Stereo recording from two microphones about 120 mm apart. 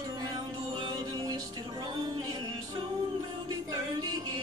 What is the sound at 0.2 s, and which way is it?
Music, 40° right (ahead or behind).